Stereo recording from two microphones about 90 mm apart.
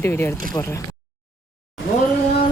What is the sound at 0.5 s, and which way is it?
Speech, 35° left (ahead or behind).